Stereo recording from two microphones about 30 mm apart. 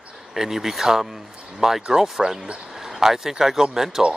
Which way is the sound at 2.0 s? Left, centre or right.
Right.